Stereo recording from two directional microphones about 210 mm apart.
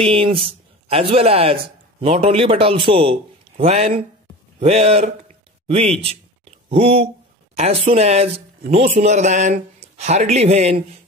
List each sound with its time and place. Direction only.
0.0 s speech: 25° right (ahead or behind)